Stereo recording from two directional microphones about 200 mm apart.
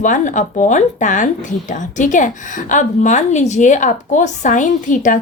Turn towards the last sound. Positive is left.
turn(degrees=40)  # may be behind; listen again after turning